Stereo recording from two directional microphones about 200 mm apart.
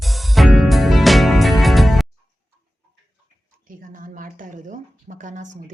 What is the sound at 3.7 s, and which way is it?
Speech, 45° right (ahead or behind).